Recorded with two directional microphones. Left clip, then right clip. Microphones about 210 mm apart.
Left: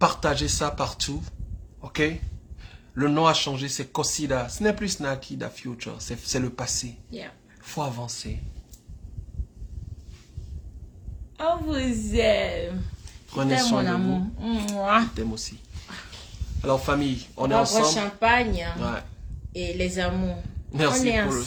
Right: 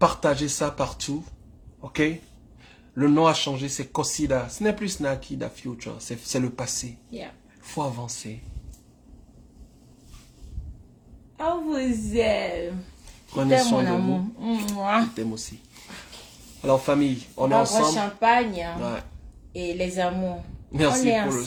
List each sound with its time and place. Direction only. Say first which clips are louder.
0.0 s speech: right 1 dB; centre (ahead or behind)
7.1 s speech: right 1 dB; 20° left (ahead or behind); by 8.4 s centre (ahead or behind)
11.3 s a woman's voice: left 1 dB; 20° left (ahead or behind)
16.6 s speech: right 3 dB; 5° left (ahead or behind)
17.7 s a woman's voice: even; 15° left (ahead or behind)
18.8 s speech: even; 5° left (ahead or behind)
19.5 s a woman's voice: right 1 dB; 20° left (ahead or behind)